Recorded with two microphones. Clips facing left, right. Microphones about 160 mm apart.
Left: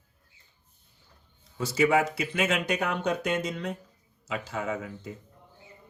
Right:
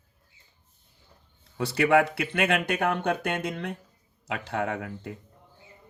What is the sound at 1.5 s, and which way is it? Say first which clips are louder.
Speech: right 2 dB; 60° right (ahead or behind).